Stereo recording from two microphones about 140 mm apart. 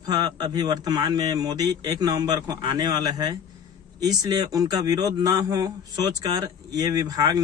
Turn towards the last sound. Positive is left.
turn(degrees=-25)  # may be behind; listen again after turning